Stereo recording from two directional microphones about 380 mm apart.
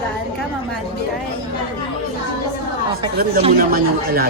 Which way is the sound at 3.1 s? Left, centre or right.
Centre.